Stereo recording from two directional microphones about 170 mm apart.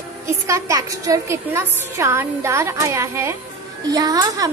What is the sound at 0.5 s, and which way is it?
A woman's voice, 20° right (ahead or behind).